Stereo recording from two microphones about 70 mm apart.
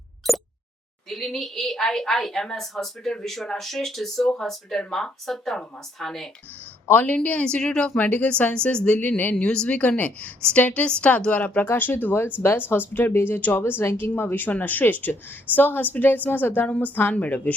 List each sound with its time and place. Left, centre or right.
0.2 s plop: centre
1.1 s a woman's voice: centre
6.8 s a woman's voice: left
7.4 s a woman's voice: centre; by 16.6 s left
16.6 s a woman's voice: centre
16.9 s a woman's voice: left